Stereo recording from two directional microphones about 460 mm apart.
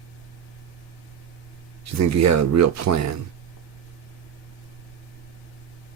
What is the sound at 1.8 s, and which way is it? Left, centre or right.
Speech, right.